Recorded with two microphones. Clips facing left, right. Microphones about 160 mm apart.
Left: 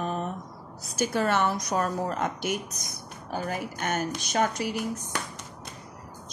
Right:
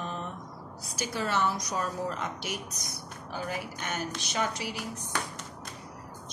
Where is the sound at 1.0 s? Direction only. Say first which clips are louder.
Left 5 dB; 55° left (ahead or behind).